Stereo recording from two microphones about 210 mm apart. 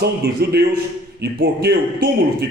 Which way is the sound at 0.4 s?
50° right (ahead or behind).